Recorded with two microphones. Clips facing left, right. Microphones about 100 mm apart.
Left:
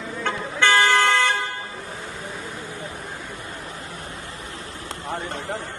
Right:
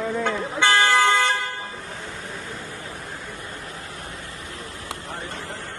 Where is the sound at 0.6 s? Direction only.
15° right (ahead or behind).